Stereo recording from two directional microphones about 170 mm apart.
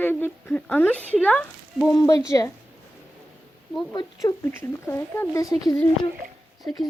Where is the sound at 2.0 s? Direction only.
20° left (ahead or behind).